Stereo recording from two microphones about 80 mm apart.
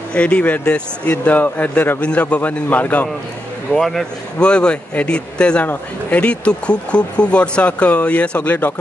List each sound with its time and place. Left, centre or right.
0.1 s speech: centre
3.7 s speech: centre; by 8.7 s left